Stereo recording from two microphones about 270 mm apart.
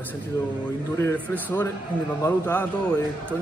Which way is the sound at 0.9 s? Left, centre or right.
Centre.